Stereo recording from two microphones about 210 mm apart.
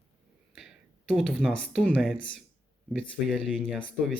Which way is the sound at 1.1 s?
Centre (ahead or behind).